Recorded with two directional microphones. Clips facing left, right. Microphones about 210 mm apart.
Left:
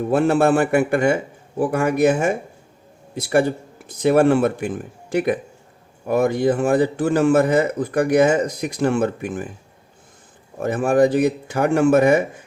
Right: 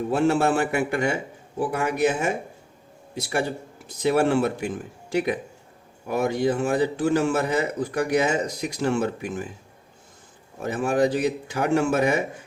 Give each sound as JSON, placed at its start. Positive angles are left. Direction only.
{"t": 0.1, "sound": "a man's voice", "side_deg": 55}
{"t": 10.6, "sound": "a man's voice", "side_deg": 55}